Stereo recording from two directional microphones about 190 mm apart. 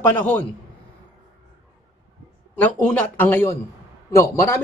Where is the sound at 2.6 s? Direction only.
10° left (ahead or behind).